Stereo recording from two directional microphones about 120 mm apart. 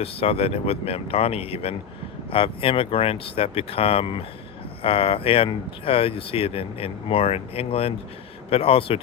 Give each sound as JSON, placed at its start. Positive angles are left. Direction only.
{"t": 0.0, "sound": "speech", "side_deg": 55}